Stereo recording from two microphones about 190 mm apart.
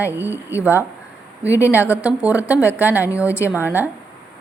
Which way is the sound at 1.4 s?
15° left (ahead or behind).